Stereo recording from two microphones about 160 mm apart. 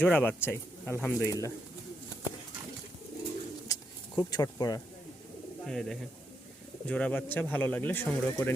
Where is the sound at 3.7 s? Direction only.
25° left (ahead or behind).